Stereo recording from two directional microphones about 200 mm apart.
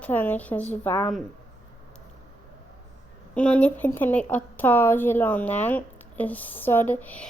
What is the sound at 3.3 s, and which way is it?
Speech, 5° left (ahead or behind).